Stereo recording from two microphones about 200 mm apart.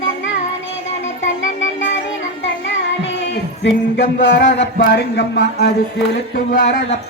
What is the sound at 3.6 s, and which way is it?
Speech, 60° left (ahead or behind).